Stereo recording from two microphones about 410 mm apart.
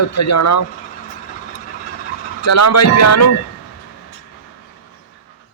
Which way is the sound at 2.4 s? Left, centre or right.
Left.